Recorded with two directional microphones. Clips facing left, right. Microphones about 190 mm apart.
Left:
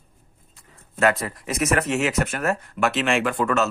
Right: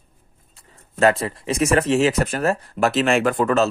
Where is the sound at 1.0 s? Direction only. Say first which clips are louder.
Right 3 dB; 30° right (ahead or behind).